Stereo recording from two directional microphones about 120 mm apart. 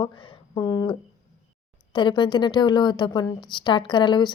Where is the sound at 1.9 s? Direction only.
40° left (ahead or behind).